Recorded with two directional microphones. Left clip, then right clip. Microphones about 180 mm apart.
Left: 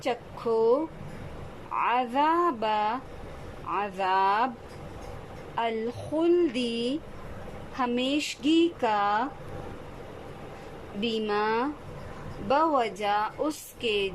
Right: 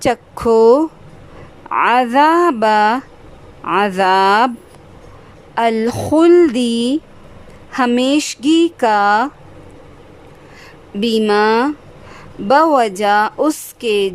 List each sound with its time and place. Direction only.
0.0 s speech: 50° right (ahead or behind)
5.5 s speech: 40° right (ahead or behind)
6.4 s speech: 35° right (ahead or behind)
11.0 s speech: 40° right (ahead or behind)